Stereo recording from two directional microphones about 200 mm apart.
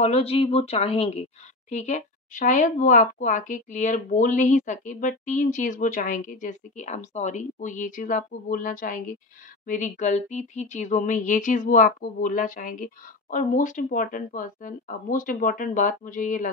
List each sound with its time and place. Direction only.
0.0 s speech: 30° left (ahead or behind)